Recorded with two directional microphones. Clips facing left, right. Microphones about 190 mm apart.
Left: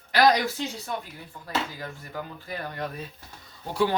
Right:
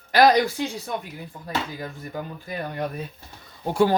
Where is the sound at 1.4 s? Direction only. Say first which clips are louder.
Right 1 dB; 15° right (ahead or behind).